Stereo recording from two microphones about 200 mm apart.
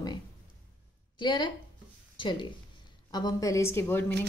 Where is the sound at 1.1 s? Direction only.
20° left (ahead or behind).